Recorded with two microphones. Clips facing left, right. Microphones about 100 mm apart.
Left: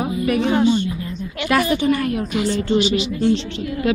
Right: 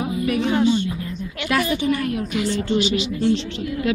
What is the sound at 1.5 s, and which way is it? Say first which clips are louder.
Speech: left 3 dB; 50° left (ahead or behind).